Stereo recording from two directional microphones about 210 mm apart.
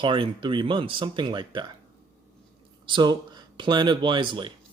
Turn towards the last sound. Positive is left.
turn(degrees=-20)  # may be behind; listen again after turning